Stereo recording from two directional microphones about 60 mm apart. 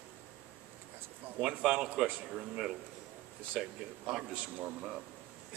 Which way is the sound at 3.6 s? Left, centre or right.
Centre.